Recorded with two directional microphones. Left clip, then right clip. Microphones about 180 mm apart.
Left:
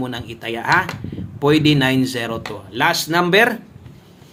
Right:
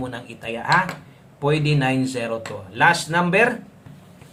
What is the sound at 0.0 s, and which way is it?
Speech, 30° left (ahead or behind).